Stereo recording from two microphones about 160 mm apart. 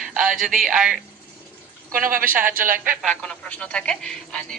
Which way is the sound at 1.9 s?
60° right (ahead or behind).